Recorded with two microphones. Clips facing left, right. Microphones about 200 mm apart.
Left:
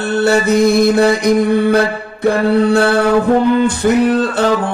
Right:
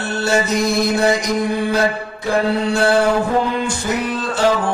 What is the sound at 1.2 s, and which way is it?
Music, 60° left (ahead or behind).